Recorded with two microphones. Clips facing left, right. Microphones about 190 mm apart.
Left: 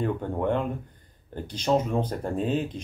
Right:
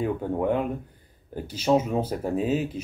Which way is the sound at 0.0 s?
5° right (ahead or behind).